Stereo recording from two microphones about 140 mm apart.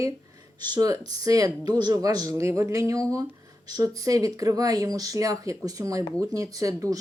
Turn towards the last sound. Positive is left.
turn(degrees=-25)  # may be behind; listen again after turning